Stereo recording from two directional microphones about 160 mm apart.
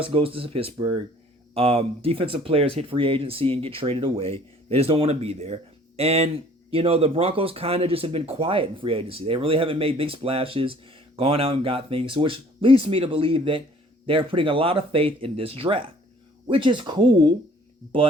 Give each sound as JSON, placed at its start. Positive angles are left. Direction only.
{"t": 0.0, "sound": "speech", "side_deg": -35}